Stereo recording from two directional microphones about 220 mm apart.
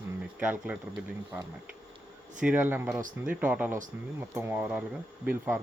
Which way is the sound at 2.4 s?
5° right (ahead or behind).